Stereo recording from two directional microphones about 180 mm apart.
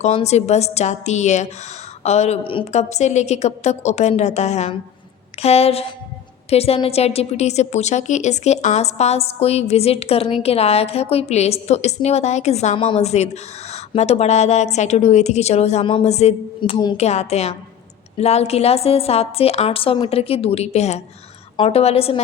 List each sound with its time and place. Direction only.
0.0 s a woman's voice: 35° left (ahead or behind)
17.0 s a woman's voice: 35° left (ahead or behind)